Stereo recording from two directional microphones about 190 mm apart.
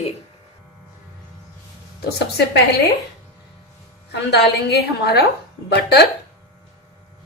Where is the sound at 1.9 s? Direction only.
55° left (ahead or behind).